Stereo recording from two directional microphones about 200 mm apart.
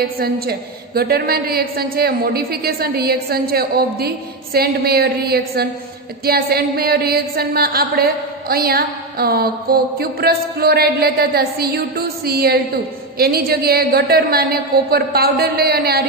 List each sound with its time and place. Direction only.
0.2 s a woman's voice: 50° right (ahead or behind)